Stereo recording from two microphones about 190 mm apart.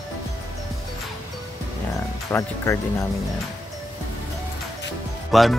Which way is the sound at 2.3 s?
15° left (ahead or behind).